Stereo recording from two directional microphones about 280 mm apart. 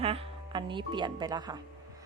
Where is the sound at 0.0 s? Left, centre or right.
Centre.